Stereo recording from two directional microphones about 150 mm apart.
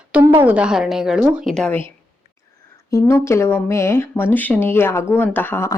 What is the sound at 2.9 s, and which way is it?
A woman's voice, 20° left (ahead or behind).